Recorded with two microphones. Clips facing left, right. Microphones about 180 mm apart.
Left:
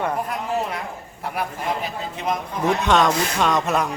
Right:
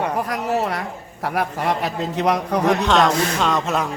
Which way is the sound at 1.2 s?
80° right.